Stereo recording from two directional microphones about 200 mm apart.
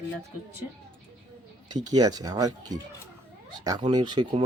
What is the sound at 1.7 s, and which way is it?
Speech, 20° right (ahead or behind).